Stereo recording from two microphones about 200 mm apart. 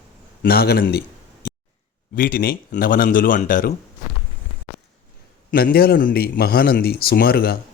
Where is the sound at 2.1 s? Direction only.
45° left (ahead or behind).